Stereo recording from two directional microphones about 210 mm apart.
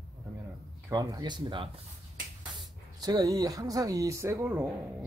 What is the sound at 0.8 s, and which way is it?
Speech, 15° right (ahead or behind).